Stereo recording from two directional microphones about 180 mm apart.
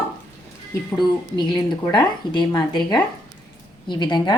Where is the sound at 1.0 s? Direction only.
25° left (ahead or behind).